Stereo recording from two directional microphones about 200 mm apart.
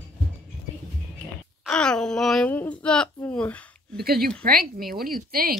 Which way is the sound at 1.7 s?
5° left (ahead or behind).